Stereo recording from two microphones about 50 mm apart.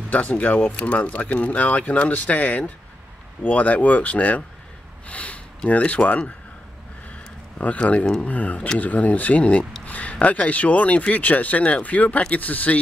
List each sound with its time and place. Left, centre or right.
0.1 s speech: left
7.5 s speech: left